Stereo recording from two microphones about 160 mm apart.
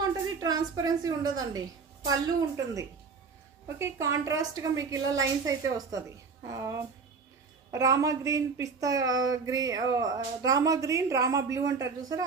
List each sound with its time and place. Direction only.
0.0 s a woman's voice: 25° right (ahead or behind)